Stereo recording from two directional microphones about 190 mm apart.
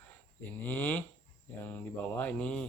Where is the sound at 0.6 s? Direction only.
10° left (ahead or behind).